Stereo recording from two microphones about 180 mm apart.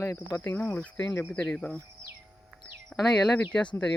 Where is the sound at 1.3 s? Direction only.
5° left (ahead or behind).